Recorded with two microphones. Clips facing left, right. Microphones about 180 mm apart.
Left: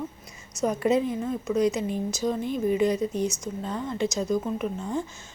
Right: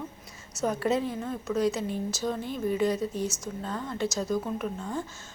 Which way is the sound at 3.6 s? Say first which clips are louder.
Left 3 dB; 15° left (ahead or behind).